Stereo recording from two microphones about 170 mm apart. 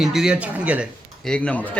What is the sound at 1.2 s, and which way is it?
Speech, 5° left (ahead or behind).